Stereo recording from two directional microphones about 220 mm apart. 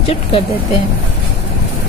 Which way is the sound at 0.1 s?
25° left (ahead or behind).